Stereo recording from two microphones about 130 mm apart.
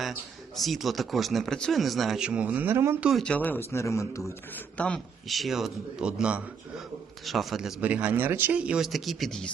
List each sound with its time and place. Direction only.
0.0 s speech: centre (ahead or behind); by 3.0 s 20° right (ahead or behind)
3.0 s speech: 5° right (ahead or behind)
3.2 s speech: 10° left (ahead or behind)
4.5 s speech: 10° left (ahead or behind)